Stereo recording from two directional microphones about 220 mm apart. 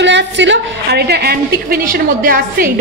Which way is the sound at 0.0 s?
55° right (ahead or behind).